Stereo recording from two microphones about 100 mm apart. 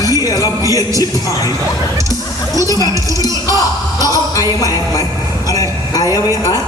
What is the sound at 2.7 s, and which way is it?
Music, 40° left (ahead or behind).